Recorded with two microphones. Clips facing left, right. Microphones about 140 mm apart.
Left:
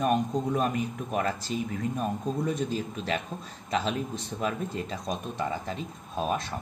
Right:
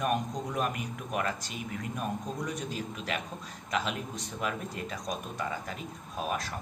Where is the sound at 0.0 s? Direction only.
30° left (ahead or behind).